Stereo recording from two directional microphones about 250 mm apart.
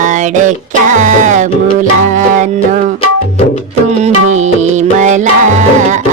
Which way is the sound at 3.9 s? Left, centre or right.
Right.